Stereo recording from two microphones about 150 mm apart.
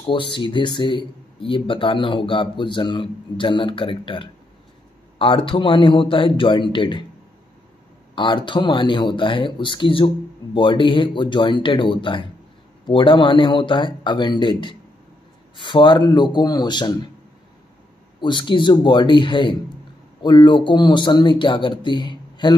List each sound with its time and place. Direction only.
0.0 s speech: 35° left (ahead or behind)
8.1 s speech: 35° left (ahead or behind)
18.2 s speech: 30° left (ahead or behind)